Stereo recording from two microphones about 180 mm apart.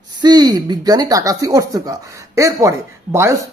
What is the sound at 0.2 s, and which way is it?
Speech, 25° right (ahead or behind).